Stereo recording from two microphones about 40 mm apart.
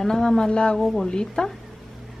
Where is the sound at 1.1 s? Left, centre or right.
Centre.